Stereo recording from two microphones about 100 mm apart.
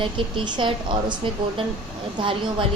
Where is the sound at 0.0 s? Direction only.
55° right (ahead or behind).